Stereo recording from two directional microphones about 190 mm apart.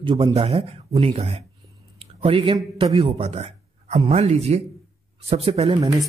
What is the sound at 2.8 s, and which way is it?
A woman's voice, 35° right (ahead or behind).